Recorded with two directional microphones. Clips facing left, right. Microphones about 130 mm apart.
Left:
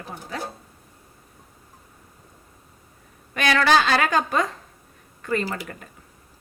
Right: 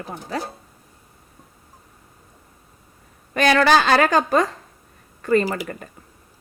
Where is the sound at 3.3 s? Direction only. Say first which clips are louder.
Right 3 dB; 40° right (ahead or behind).